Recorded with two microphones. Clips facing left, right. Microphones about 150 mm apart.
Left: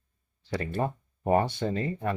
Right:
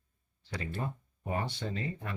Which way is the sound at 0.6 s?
55° left (ahead or behind).